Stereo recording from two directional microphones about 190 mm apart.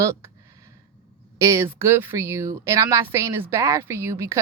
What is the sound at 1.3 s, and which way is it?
A woman's voice, 15° right (ahead or behind).